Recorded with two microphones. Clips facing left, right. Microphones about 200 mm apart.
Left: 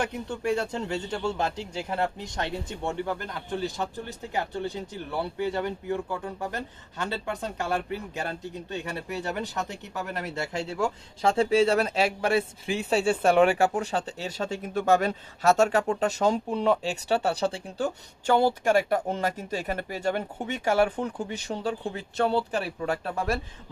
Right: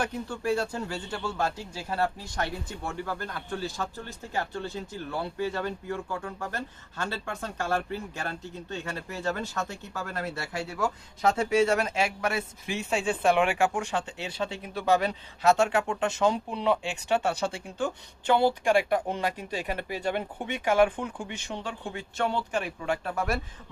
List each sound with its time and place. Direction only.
0.0 s a man's voice: 20° left (ahead or behind)